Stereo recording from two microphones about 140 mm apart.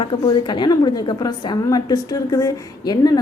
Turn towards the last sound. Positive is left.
turn(degrees=30)  # may be behind; listen again after turning